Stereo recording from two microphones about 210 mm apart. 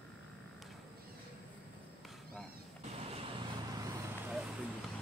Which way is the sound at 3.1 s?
25° right (ahead or behind).